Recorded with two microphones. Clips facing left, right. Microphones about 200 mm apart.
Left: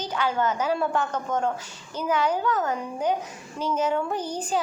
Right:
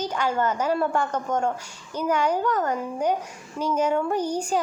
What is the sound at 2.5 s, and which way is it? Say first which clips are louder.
Speech: right 1 dB; 10° left (ahead or behind).